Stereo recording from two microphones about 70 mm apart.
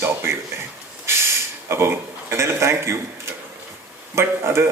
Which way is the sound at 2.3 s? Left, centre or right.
Right.